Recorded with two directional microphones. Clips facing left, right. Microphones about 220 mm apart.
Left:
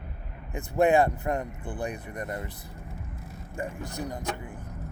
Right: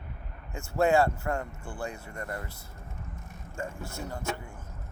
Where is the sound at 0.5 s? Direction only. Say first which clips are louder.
Left 2 dB; 20° left (ahead or behind).